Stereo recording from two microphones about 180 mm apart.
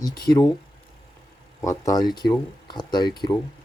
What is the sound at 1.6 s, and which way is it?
Speech, 15° left (ahead or behind).